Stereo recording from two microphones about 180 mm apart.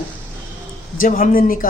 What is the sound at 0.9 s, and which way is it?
Speech, 50° left (ahead or behind).